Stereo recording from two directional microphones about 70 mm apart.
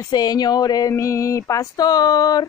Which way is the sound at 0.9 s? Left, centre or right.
Left.